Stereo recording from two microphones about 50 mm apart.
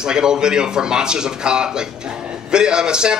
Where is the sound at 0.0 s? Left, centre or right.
Centre.